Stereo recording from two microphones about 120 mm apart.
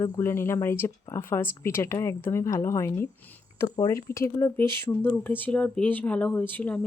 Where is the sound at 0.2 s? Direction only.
20° left (ahead or behind).